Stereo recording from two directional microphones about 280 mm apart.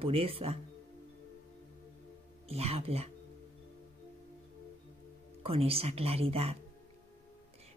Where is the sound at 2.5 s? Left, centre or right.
Right.